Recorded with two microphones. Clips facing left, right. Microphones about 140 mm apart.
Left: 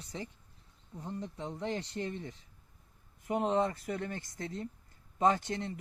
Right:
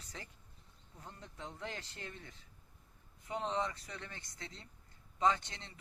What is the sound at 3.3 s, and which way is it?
Speech, 55° left (ahead or behind).